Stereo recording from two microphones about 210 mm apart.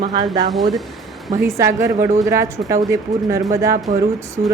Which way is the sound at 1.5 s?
15° right (ahead or behind).